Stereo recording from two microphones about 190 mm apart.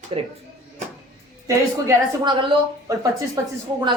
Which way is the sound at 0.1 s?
30° right (ahead or behind).